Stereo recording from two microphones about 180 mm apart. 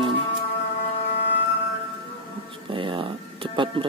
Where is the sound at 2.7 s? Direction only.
30° right (ahead or behind).